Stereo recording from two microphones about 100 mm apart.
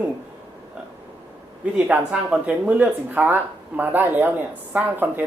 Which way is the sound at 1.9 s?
15° right (ahead or behind).